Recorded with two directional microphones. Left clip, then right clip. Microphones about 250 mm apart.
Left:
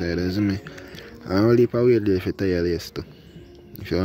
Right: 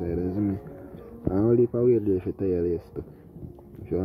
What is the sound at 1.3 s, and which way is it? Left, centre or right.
Speech, left.